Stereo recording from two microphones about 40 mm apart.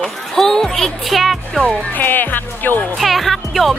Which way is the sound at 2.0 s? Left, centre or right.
Left.